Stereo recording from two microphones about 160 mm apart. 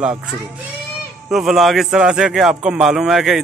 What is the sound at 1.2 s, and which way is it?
A man's voice, 5° right (ahead or behind).